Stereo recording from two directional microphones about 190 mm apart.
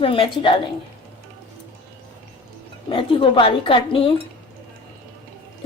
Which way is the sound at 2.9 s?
25° left (ahead or behind).